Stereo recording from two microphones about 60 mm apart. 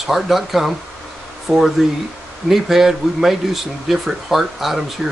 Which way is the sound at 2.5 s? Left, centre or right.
Centre.